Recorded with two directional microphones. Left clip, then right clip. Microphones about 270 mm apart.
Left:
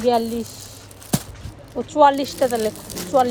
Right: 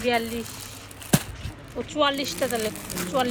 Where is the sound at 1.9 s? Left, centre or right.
Centre.